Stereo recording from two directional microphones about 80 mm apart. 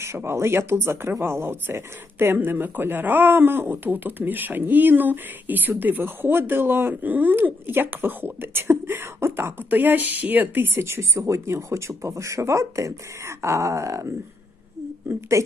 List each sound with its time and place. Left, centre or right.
0.0 s speech: right